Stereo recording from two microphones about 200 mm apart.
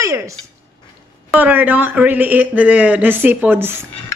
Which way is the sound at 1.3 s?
10° right (ahead or behind).